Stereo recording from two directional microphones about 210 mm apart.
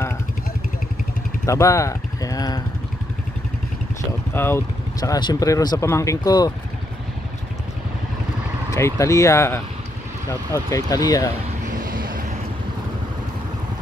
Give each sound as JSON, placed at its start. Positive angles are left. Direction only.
{"t": 1.4, "sound": "speech", "side_deg": 15}
{"t": 4.3, "sound": "speech", "side_deg": 10}
{"t": 8.7, "sound": "speech", "side_deg": 15}
{"t": 11.6, "sound": "vehicle", "side_deg": -40}